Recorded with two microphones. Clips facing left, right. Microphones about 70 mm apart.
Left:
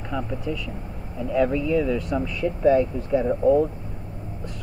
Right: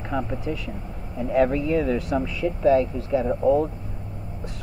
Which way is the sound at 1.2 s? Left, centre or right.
Right.